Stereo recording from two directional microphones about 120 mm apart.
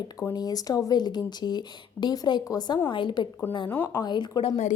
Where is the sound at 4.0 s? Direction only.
40° left (ahead or behind).